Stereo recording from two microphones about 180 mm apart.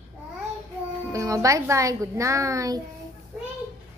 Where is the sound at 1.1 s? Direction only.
15° right (ahead or behind).